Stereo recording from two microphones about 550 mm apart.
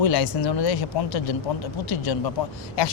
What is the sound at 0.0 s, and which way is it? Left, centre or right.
Speech, left.